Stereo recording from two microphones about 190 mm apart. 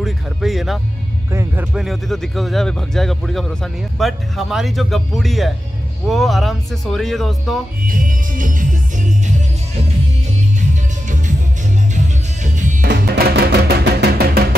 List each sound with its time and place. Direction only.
0.0 s speech: centre (ahead or behind)
1.3 s speech: 15° right (ahead or behind)
1.7 s speech: centre (ahead or behind)
7.8 s music: 45° right (ahead or behind)
12.8 s music: 60° right (ahead or behind)